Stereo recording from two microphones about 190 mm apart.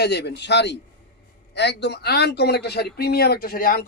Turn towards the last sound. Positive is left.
turn(degrees=50)  # may be behind; listen again after turning